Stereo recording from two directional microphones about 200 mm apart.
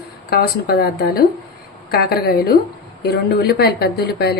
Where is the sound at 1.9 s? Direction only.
50° left (ahead or behind).